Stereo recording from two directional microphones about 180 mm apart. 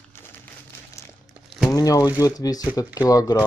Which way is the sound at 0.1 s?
15° left (ahead or behind).